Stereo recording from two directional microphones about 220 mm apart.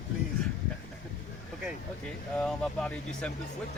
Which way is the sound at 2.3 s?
5° left (ahead or behind).